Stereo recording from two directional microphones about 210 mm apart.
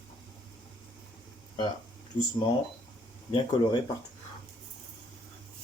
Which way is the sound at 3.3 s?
25° left (ahead or behind).